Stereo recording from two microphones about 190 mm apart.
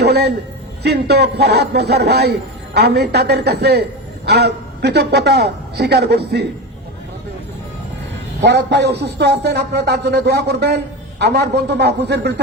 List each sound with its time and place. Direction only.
0.0 s a sound: 60° right (ahead or behind)
0.8 s a man's voice: 60° right (ahead or behind)
8.4 s a man's voice: 65° right (ahead or behind)